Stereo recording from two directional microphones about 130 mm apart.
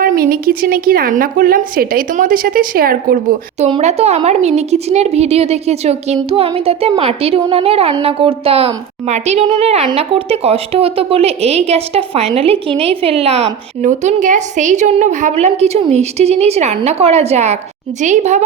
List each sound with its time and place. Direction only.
0.0 s a woman's voice: 90° right
3.8 s a woman's voice: 60° right (ahead or behind)